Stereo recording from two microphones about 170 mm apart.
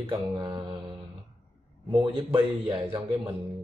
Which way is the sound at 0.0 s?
25° right (ahead or behind).